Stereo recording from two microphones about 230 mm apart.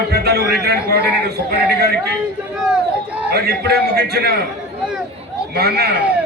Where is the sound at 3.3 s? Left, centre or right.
Right.